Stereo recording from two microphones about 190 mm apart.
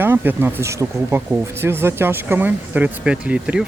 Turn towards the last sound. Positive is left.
turn(degrees=-5)  # may be behind; listen again after turning